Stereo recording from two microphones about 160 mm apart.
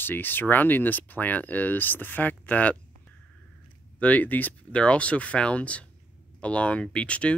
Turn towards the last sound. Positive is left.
turn(degrees=5)  # may be behind; listen again after turning